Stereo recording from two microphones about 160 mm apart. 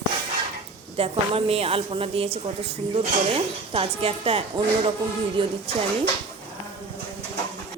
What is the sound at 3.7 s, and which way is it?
A woman's voice, 35° right (ahead or behind).